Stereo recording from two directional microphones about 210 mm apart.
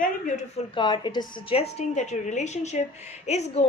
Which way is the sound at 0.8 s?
20° left (ahead or behind).